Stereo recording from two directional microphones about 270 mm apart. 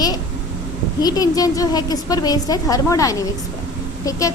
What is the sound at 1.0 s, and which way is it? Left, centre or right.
A woman's voice, centre.